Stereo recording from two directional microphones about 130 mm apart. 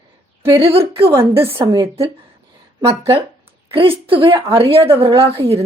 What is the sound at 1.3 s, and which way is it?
Speech, 20° right (ahead or behind).